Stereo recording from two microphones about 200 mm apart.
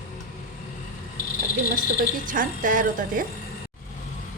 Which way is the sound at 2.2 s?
40° right (ahead or behind).